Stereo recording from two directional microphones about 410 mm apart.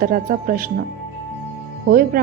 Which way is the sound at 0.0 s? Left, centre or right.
Right.